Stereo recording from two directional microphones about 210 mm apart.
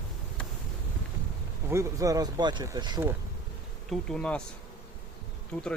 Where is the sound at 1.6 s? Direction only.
15° right (ahead or behind).